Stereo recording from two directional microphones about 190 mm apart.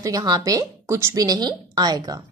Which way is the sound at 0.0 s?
20° right (ahead or behind).